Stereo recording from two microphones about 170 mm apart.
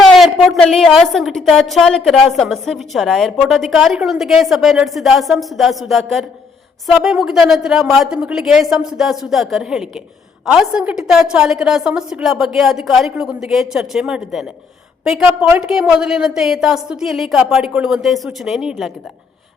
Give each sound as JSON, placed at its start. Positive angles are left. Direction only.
{"t": 0.0, "sound": "a woman's voice", "side_deg": 0}